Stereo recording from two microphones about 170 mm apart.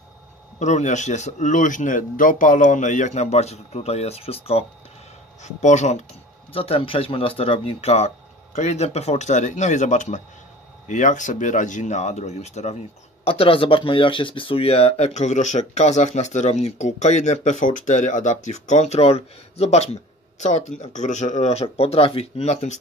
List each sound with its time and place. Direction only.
0.6 s speech: 45° left (ahead or behind)